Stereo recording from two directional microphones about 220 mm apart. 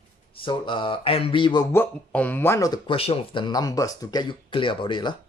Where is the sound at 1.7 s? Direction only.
10° left (ahead or behind).